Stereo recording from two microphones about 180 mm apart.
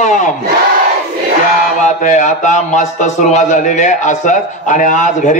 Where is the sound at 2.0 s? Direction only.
45° left (ahead or behind).